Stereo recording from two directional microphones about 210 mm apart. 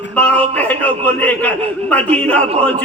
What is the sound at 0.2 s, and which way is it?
A man's voice, 5° left (ahead or behind).